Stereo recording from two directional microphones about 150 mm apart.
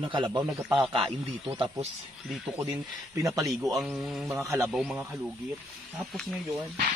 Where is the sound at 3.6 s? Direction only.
5° right (ahead or behind).